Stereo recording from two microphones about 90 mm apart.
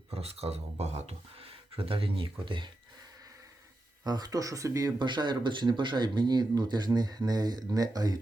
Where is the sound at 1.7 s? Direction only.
90° right; by 2.7 s 70° right (ahead or behind).